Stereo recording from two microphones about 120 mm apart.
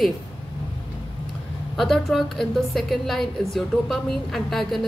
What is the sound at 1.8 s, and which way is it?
A woman's voice, centre (ahead or behind).